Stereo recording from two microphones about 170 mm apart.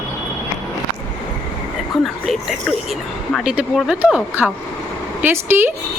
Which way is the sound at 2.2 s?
Centre (ahead or behind).